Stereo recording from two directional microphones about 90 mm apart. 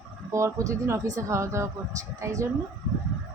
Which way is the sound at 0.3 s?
35° right (ahead or behind).